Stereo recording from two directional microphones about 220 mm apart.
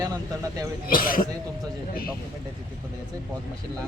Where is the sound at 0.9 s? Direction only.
40° left (ahead or behind).